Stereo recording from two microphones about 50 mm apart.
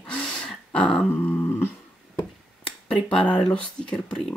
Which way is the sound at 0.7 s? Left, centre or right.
Left.